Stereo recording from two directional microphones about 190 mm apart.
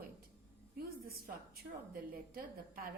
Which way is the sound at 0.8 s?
50° right (ahead or behind).